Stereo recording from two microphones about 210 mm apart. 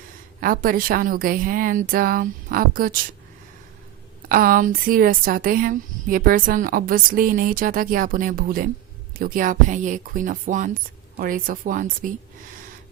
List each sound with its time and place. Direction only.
0.3 s a woman's voice: 45° right (ahead or behind)
4.3 s a woman's voice: 40° right (ahead or behind)